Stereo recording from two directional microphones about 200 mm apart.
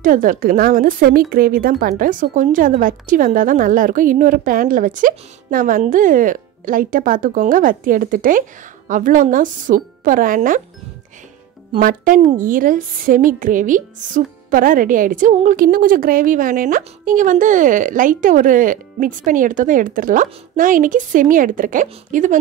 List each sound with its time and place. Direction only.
0.0 s a woman's voice: 40° right (ahead or behind)
11.7 s a woman's voice: 45° right (ahead or behind)